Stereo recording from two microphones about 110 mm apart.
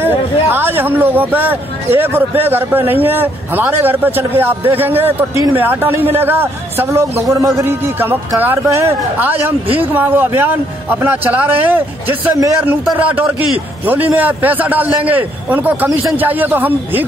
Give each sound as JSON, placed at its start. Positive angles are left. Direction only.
{"t": 0.0, "sound": "speech", "side_deg": -20}